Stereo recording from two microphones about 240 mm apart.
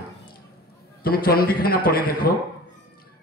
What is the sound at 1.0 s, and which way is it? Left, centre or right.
A man's voice, left.